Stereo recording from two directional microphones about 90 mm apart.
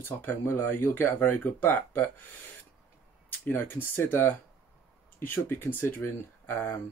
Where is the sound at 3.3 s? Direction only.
20° left (ahead or behind).